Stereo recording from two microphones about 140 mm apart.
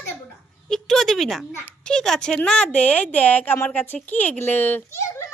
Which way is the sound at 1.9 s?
5° left (ahead or behind).